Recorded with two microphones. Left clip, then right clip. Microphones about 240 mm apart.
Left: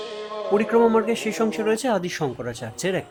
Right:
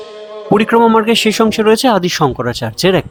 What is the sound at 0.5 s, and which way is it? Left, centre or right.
A man's voice, right.